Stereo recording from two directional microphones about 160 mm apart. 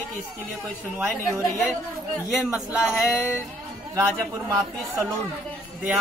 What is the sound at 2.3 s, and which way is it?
Speech, centre (ahead or behind).